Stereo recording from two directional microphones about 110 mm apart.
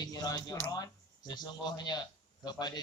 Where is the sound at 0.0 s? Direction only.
35° left (ahead or behind).